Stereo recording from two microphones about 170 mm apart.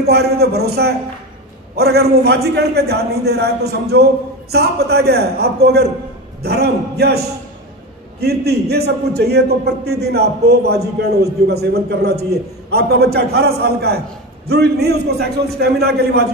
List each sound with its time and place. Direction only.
0.0 s a man's voice: 70° right (ahead or behind)